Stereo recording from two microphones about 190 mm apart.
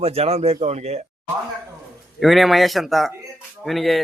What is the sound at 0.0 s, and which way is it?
Speech, 30° right (ahead or behind).